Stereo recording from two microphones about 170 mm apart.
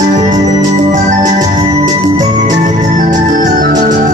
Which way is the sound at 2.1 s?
45° right (ahead or behind).